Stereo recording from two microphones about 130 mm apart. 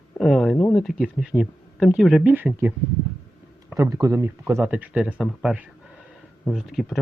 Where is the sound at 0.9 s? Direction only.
5° right (ahead or behind).